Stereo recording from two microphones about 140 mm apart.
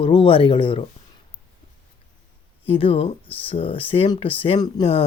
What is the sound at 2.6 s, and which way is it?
Speech, 45° left (ahead or behind).